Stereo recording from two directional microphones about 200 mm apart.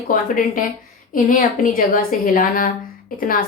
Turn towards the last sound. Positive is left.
turn(degrees=45)  # may be behind; listen again after turning